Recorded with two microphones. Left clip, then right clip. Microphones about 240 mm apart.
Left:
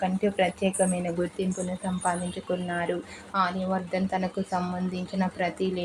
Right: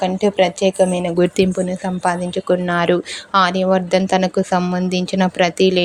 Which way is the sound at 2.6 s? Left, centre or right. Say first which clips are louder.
Right 13 dB; right.